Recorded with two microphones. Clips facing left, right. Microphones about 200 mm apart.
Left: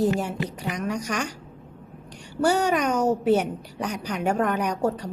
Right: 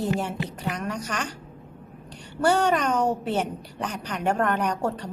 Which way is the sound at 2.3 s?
10° left (ahead or behind).